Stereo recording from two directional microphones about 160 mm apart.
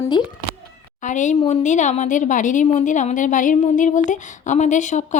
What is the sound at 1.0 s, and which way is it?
A woman's voice, 50° left (ahead or behind).